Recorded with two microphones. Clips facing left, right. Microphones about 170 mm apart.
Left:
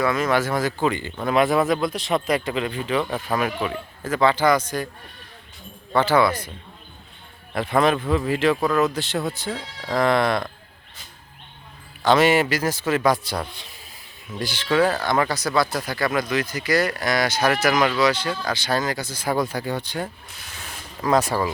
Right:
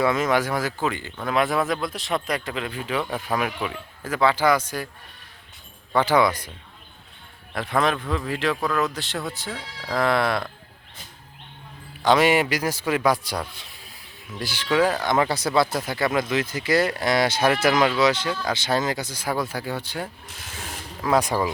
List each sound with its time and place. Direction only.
0.0 s speech: 20° right (ahead or behind)
5.9 s speech: 15° right (ahead or behind)
7.5 s speech: centre (ahead or behind)
12.0 s speech: 15° right (ahead or behind)